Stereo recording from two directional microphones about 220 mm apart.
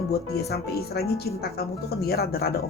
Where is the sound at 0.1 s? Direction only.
45° left (ahead or behind).